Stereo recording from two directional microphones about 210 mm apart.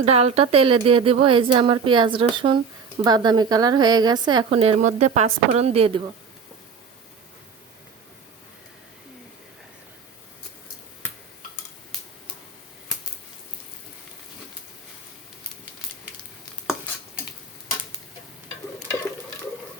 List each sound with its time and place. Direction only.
0.0 s a woman's voice: 30° right (ahead or behind)